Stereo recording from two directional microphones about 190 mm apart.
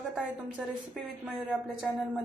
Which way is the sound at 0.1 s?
5° right (ahead or behind).